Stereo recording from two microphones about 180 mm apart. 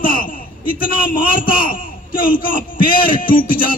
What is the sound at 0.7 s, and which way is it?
A man's voice, 50° left (ahead or behind).